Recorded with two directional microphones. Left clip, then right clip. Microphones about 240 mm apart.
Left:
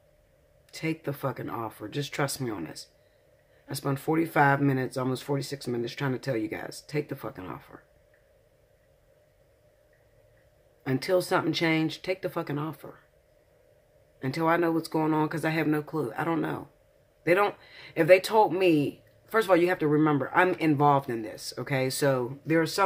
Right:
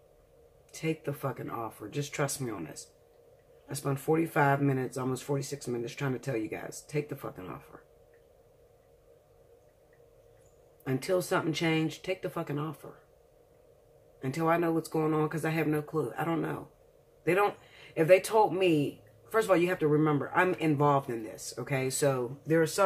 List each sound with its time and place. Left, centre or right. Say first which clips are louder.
0.7 s speech: left 2 dB; left
10.8 s speech: left 4 dB; left
14.2 s speech: left 3 dB; left